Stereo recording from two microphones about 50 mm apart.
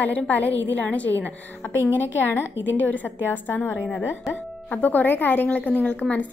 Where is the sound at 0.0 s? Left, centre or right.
Left.